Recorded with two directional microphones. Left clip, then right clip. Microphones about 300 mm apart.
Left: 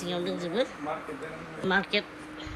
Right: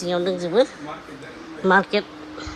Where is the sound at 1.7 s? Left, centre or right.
Centre.